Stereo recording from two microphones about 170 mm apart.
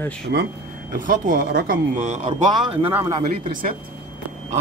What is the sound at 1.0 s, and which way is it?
A man's voice, 50° right (ahead or behind).